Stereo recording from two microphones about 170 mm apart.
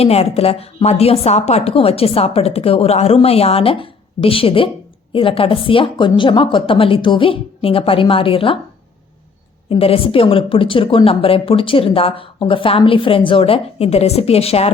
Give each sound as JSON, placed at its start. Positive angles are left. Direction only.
{"t": 0.0, "sound": "speech", "side_deg": 35}
{"t": 9.6, "sound": "speech", "side_deg": 35}